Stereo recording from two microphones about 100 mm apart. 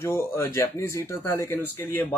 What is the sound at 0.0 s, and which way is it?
Speech, 25° left (ahead or behind).